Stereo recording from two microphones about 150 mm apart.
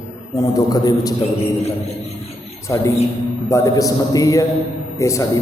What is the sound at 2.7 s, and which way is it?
A man's voice, 20° left (ahead or behind).